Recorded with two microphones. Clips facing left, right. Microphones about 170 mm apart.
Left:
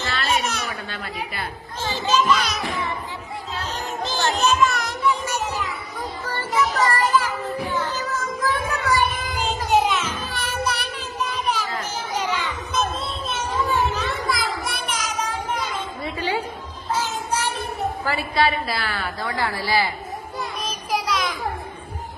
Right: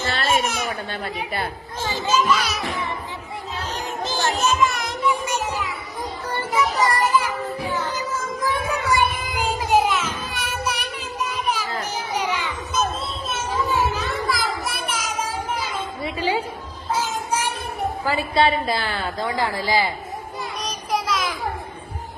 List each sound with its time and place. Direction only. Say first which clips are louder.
0.4 s a sound: right 2 dB; 15° right (ahead or behind)
0.7 s a child's voice: right 3 dB; 35° right (ahead or behind)
1.8 s a child's voice: even; 10° right (ahead or behind)
3.6 s a sound: even; 10° right (ahead or behind)
6.2 s music: right 1 dB; 15° right (ahead or behind)
7.7 s child singing: even; 15° right (ahead or behind)
10.2 s music: left 1 dB; 10° right (ahead or behind)
12.1 s children playing: even; 15° right (ahead or behind)
13.9 s music: even; 5° right (ahead or behind)
16.0 s a sound: right 2 dB; 15° right (ahead or behind)
16.9 s child singing: right 1 dB; 10° right (ahead or behind)
18.0 s a woman's voice: right 2 dB; 15° right (ahead or behind)
18.3 s a woman's voice: right 2 dB; 25° right (ahead or behind)
20.4 s child singing: left 1 dB; centre (ahead or behind)